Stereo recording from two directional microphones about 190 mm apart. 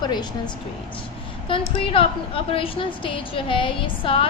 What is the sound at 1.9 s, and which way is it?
A woman's voice, 30° left (ahead or behind).